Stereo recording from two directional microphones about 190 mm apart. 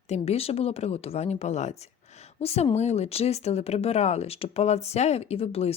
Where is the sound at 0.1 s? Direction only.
30° left (ahead or behind).